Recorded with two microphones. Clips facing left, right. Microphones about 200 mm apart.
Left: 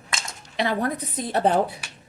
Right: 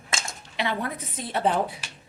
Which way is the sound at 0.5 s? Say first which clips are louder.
Left 5 dB; 40° left (ahead or behind).